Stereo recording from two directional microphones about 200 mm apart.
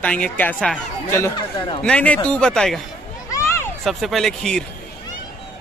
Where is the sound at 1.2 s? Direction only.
20° left (ahead or behind).